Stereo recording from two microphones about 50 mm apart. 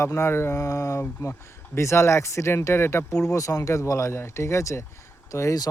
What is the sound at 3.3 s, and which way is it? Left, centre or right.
Speech, left.